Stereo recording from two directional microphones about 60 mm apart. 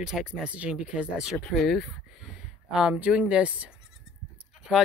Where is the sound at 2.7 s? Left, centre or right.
Centre.